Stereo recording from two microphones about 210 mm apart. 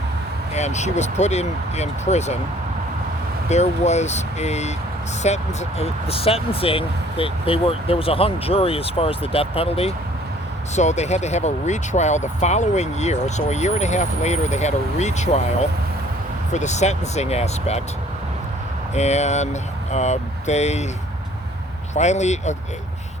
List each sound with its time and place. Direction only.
0.5 s speech: 35° left (ahead or behind)
3.5 s speech: 30° left (ahead or behind)
16.5 s speech: 35° left (ahead or behind)
18.9 s speech: 30° left (ahead or behind)
21.9 s speech: 35° left (ahead or behind)